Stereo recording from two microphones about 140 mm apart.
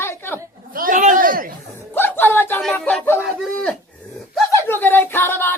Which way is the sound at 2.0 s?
15° left (ahead or behind).